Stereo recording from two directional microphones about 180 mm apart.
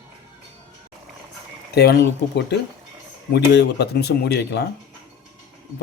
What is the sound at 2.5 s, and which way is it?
Speech, 70° left (ahead or behind).